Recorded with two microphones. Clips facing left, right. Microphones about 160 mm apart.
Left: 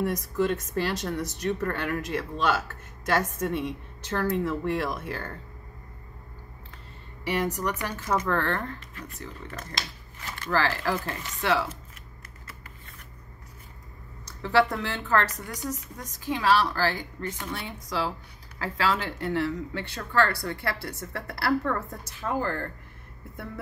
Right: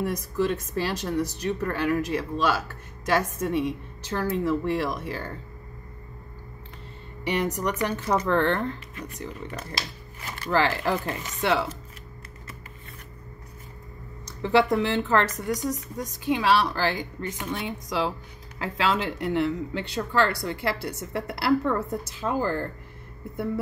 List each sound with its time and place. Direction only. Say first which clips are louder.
1.4 s speech: right 2 dB; 15° right (ahead or behind)
7.2 s speech: right 2 dB; 20° right (ahead or behind)
14.4 s speech: right 3 dB; 20° right (ahead or behind)